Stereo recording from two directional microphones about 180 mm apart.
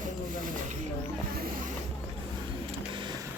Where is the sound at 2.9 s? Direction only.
25° right (ahead or behind).